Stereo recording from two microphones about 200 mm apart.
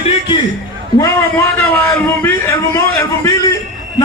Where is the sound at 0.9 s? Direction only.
15° left (ahead or behind).